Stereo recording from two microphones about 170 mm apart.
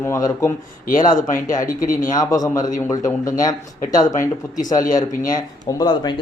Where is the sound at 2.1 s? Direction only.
20° left (ahead or behind).